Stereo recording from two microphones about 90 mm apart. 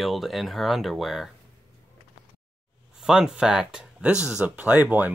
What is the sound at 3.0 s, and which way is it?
Speech, 5° right (ahead or behind).